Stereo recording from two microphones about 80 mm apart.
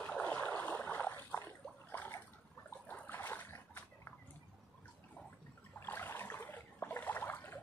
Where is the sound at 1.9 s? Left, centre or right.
Left.